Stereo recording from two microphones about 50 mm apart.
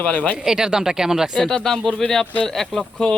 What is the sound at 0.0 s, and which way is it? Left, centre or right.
Speech, left.